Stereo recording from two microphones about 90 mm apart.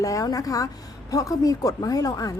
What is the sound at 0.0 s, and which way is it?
A woman's voice, 40° left (ahead or behind).